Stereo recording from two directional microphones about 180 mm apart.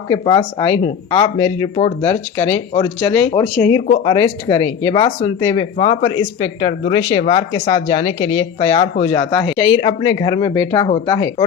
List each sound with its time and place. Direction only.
0.1 s speech: 20° left (ahead or behind)
1.7 s speech: 35° left (ahead or behind)